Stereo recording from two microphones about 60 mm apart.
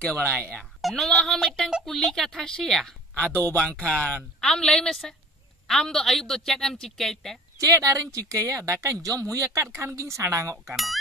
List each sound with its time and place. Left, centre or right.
0.0 s speech: left
0.7 s a woman's voice: centre
3.2 s a woman's voice: centre
7.5 s a woman's voice: right